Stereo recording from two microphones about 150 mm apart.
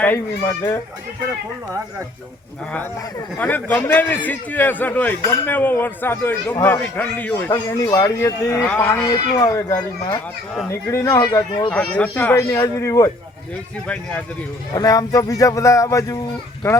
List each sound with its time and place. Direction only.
0.0 s a man's voice: 15° left (ahead or behind)
3.3 s a man's voice: 10° left (ahead or behind)
9.0 s a man's voice: 25° left (ahead or behind)
11.7 s a man's voice: 5° left (ahead or behind)
13.8 s a man's voice: 10° left (ahead or behind)
14.7 s a man's voice: 25° left (ahead or behind)